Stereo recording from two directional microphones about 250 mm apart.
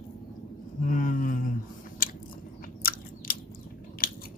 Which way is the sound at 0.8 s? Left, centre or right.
Left.